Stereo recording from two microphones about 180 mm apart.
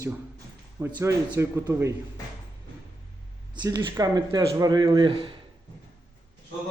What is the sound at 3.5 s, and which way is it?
Speech, 20° right (ahead or behind).